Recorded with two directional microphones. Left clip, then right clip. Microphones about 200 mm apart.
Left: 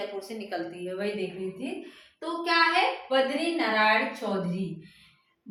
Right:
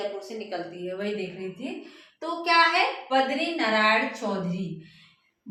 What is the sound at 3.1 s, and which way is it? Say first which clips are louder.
Speech: right 1 dB; 10° left (ahead or behind).